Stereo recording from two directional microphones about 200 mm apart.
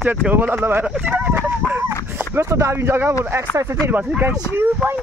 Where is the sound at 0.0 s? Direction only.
10° right (ahead or behind).